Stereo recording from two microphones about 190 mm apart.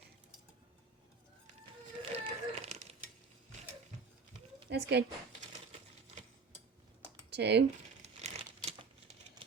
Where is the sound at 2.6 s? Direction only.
35° right (ahead or behind).